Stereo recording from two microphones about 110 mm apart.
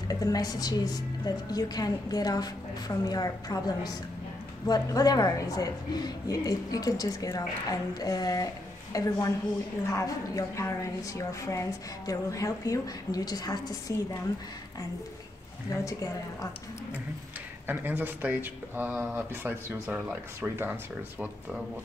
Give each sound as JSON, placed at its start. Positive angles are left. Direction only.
{"t": 0.1, "sound": "a woman's voice", "side_deg": 35}
{"t": 15.7, "sound": "a woman's voice", "side_deg": 30}
{"t": 17.6, "sound": "speech", "side_deg": -15}